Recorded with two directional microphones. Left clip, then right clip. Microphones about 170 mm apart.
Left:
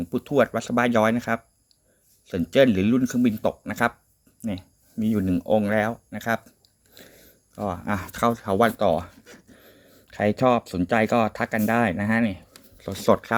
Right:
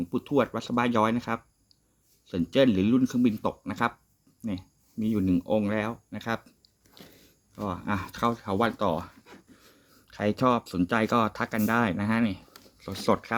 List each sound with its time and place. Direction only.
0.0 s speech: 10° left (ahead or behind)
7.5 s speech: 15° left (ahead or behind)